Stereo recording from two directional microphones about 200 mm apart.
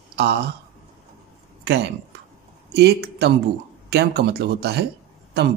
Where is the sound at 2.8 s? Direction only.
55° right (ahead or behind).